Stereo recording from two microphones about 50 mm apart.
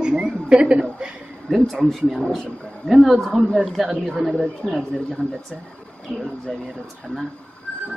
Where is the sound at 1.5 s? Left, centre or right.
Centre.